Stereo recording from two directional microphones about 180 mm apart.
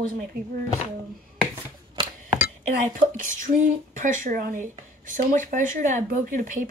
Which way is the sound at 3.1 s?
45° right (ahead or behind).